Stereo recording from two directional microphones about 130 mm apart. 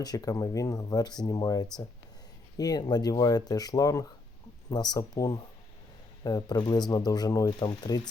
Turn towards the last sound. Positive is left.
turn(degrees=35)  # may be behind; listen again after turning